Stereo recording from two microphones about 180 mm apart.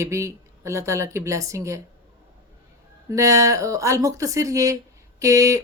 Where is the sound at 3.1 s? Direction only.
15° right (ahead or behind).